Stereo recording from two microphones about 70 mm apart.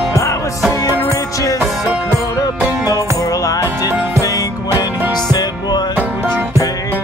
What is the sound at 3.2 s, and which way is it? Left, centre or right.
Music, left.